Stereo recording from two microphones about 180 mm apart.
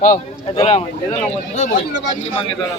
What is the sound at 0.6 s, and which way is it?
Speech, 35° left (ahead or behind).